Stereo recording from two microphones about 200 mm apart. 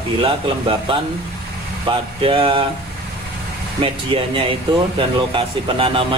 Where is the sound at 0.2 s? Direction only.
25° right (ahead or behind).